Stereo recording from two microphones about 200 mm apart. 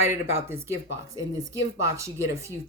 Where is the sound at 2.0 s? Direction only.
15° right (ahead or behind).